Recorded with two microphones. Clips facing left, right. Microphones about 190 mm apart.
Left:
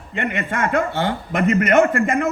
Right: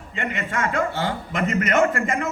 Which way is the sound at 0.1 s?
60° left (ahead or behind).